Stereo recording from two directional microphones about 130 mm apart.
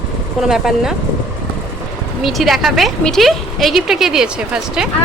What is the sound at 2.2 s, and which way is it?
A woman's voice, centre (ahead or behind).